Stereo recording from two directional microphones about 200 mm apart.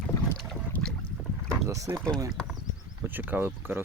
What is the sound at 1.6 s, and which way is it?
Speech, 15° right (ahead or behind).